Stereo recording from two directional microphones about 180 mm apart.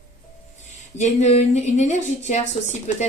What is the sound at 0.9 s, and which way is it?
A woman's voice, 40° left (ahead or behind).